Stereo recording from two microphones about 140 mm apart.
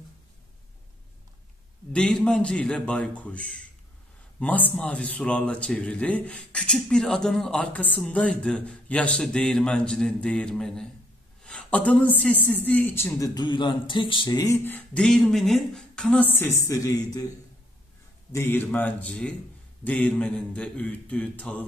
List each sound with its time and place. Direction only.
1.9 s a man's voice: 5° left (ahead or behind)
13.3 s speech: 35° left (ahead or behind)
15.0 s speech: 5° left (ahead or behind); by 17.3 s 25° left (ahead or behind)
18.3 s speech: 15° left (ahead or behind)